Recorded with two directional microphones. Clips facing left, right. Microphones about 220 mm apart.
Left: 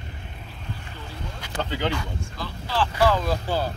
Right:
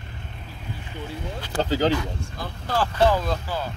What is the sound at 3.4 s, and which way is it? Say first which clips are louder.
Speech: left 4 dB; 30° left (ahead or behind).